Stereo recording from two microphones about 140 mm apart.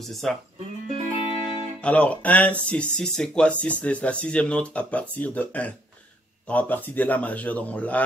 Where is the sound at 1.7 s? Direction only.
10° left (ahead or behind).